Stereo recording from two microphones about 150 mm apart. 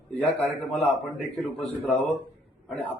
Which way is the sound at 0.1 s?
5° left (ahead or behind).